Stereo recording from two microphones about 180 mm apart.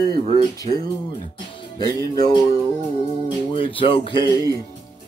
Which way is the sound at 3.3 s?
30° left (ahead or behind).